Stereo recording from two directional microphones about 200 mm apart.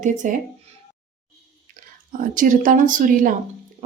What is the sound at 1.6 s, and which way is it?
Speech, 40° right (ahead or behind).